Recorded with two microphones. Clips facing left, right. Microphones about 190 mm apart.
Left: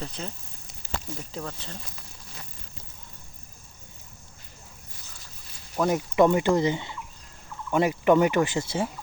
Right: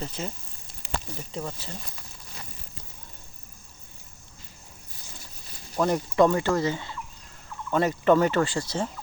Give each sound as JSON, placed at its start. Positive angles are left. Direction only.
{"t": 0.0, "sound": "speech", "side_deg": -5}
{"t": 1.4, "sound": "speech", "side_deg": -10}
{"t": 5.7, "sound": "speech", "side_deg": 5}
{"t": 6.1, "sound": "speech", "side_deg": 15}